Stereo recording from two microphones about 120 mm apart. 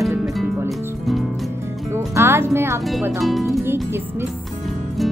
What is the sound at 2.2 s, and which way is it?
Speech, 20° right (ahead or behind).